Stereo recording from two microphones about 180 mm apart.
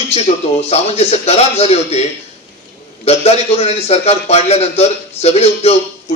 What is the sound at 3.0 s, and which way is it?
A man's voice, 35° left (ahead or behind).